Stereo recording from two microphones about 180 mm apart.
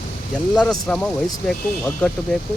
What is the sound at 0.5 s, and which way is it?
Speech, 5° left (ahead or behind).